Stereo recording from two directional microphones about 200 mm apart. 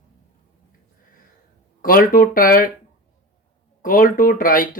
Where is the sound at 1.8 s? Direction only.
45° left (ahead or behind).